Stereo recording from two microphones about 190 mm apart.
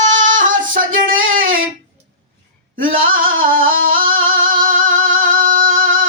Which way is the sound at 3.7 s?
90° right.